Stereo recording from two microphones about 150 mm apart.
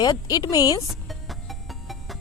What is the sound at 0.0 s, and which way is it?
Speech, 25° left (ahead or behind).